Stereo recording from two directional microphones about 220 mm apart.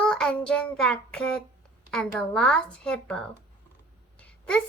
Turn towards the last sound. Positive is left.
turn(degrees=5)  # may be behind; listen again after turning